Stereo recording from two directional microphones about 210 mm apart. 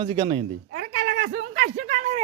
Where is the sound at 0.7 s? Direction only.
55° right (ahead or behind); by 2.2 s 35° right (ahead or behind).